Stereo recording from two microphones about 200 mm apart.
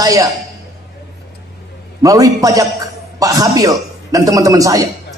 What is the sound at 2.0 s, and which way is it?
A man's voice, 15° right (ahead or behind).